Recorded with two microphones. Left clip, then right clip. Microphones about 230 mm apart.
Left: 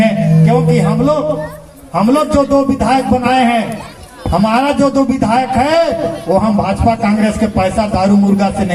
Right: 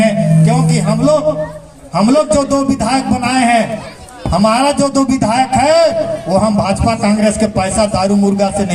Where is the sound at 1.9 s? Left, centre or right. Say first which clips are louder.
Right 1 dB; right.